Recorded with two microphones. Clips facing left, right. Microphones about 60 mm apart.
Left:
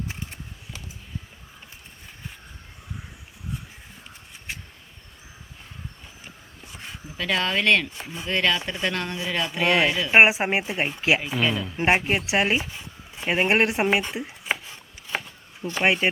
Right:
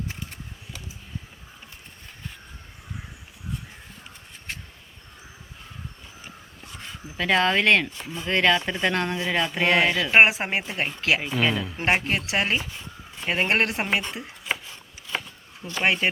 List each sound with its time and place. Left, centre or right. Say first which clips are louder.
7.2 s speech: right 3 dB; centre
10.1 s speech: left 2 dB; centre
11.3 s speech: right 1 dB; centre
11.8 s speech: left 3 dB; centre
15.6 s speech: left 2 dB; centre